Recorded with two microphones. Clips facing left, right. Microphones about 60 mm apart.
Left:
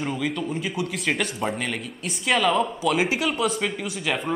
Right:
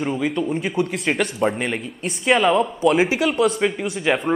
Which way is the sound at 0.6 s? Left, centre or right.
Right.